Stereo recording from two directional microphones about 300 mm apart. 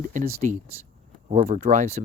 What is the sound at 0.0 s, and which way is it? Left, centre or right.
Speech, right.